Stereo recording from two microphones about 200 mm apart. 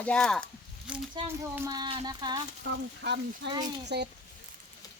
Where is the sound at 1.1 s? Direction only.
15° right (ahead or behind).